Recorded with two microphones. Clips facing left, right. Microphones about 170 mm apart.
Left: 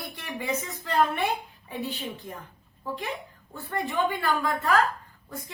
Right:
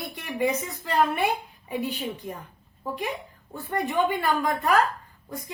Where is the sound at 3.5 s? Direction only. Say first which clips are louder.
Right 3 dB; 20° right (ahead or behind).